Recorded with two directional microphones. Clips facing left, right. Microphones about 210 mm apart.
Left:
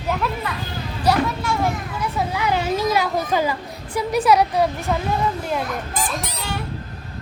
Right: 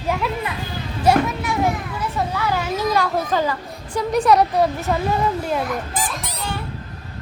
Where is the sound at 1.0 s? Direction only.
20° right (ahead or behind).